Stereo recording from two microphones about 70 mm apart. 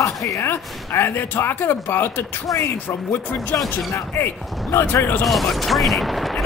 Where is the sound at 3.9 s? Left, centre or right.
Left.